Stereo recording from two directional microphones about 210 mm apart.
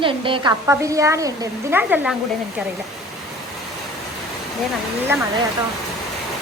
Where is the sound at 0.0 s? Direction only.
25° right (ahead or behind).